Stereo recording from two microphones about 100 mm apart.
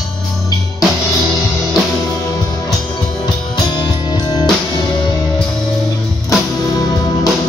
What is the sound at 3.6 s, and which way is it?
Music, 45° left (ahead or behind).